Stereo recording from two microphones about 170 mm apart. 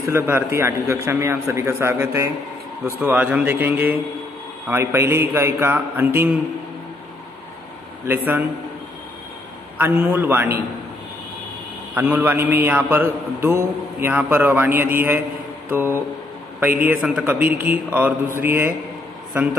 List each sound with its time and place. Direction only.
0.0 s a man's voice: 15° right (ahead or behind)
8.1 s a man's voice: 10° right (ahead or behind)
9.8 s a man's voice: 10° right (ahead or behind)
11.9 s a man's voice: 10° right (ahead or behind)